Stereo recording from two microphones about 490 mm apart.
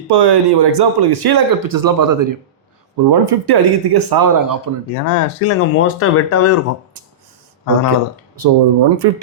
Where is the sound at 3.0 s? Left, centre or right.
Right.